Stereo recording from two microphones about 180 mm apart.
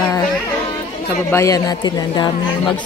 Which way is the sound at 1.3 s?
20° left (ahead or behind).